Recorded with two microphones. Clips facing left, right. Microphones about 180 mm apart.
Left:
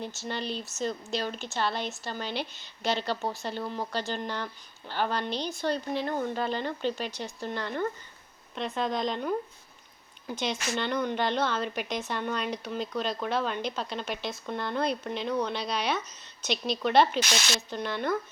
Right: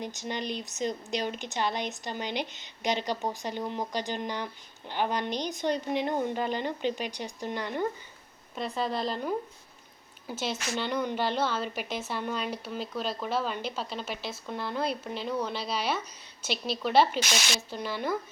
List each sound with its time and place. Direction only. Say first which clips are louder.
0.0 s speech: even; 15° right (ahead or behind)
8.5 s a woman's voice: left 1 dB; centre (ahead or behind)